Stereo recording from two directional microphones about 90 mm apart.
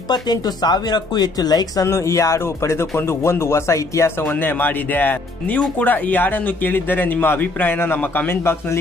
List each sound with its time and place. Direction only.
0.1 s speech: 50° left (ahead or behind)
1.9 s speech: 35° left (ahead or behind)
4.2 s speech: 20° left (ahead or behind)